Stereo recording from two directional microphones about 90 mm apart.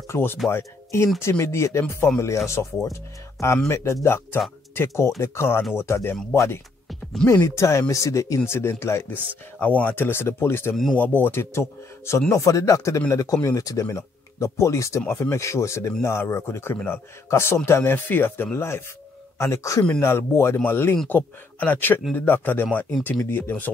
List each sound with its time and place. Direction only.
0.1 s speech: 25° left (ahead or behind)
9.6 s speech: 15° left (ahead or behind)